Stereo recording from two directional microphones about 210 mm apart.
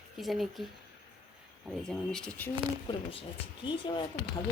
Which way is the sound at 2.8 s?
25° left (ahead or behind).